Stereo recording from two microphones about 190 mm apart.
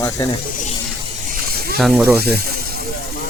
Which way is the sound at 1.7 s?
Centre (ahead or behind).